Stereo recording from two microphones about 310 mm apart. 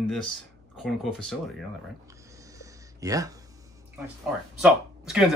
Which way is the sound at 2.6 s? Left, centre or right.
Centre.